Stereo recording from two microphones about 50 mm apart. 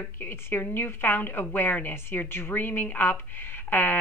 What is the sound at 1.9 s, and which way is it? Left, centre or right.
A woman's voice, left.